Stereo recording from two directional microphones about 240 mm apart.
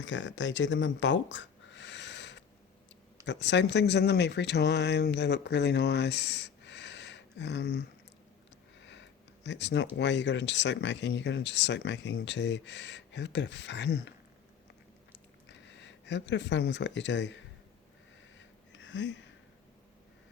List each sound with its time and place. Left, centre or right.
0.0 s speech: left
15.4 s speech: left
18.3 s a sound: left